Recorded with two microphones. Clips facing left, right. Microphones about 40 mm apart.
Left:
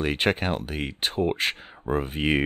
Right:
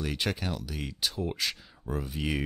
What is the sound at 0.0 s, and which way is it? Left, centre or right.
Speech, left.